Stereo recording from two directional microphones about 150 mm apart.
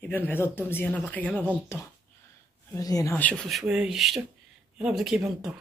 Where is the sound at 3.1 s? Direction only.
10° left (ahead or behind).